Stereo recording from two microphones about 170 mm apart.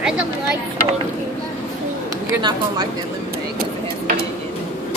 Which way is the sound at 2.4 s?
25° right (ahead or behind).